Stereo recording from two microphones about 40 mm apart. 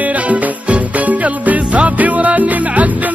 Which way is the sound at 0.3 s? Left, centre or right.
Right.